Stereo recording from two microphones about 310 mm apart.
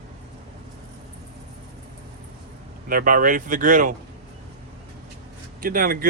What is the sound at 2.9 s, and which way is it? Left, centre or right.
Speech, right.